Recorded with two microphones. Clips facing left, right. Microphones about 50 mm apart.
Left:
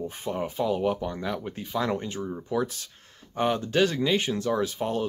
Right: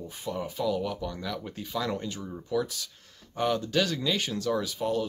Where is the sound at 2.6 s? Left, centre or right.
Left.